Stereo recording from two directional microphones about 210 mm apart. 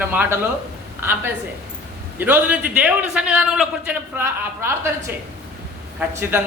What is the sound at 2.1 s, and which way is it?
A man's voice, 10° right (ahead or behind).